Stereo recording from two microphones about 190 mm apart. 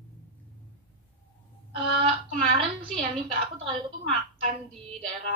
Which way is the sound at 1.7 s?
25° right (ahead or behind).